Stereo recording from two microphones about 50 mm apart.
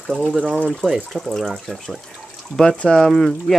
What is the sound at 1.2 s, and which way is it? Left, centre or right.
Speech, centre.